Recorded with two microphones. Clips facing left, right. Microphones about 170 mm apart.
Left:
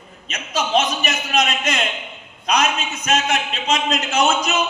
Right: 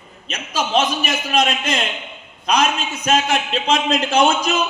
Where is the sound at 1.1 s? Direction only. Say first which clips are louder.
Right 2 dB; 30° right (ahead or behind).